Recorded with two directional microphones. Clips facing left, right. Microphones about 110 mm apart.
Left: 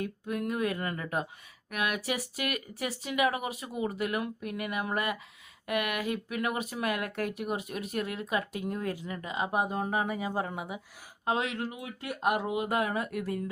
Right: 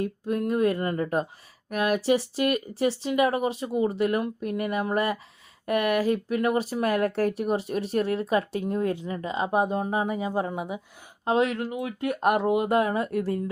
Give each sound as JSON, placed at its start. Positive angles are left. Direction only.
{"t": 0.0, "sound": "speech", "side_deg": -30}
{"t": 12.0, "sound": "speech", "side_deg": -50}
{"t": 12.6, "sound": "speech", "side_deg": -25}